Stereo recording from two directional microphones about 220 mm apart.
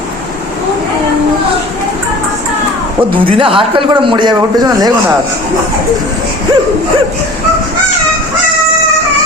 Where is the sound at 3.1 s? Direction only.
25° right (ahead or behind).